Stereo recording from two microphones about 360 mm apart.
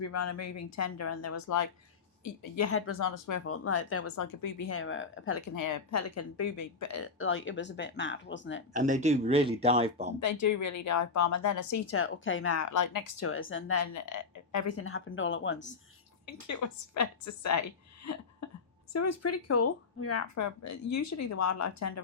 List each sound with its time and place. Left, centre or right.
0.0 s speech: left
2.6 s a woman's voice: left
3.0 s speech: left
3.4 s a woman's voice: left
4.6 s a woman's voice: left
5.5 s a woman's voice: left
8.7 s speech: right
10.3 s speech: left
11.9 s speech: left
13.2 s a woman's voice: left
16.2 s a woman's voice: left